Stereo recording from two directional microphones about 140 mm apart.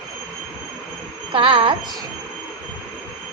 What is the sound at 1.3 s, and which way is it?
Speech, 40° right (ahead or behind).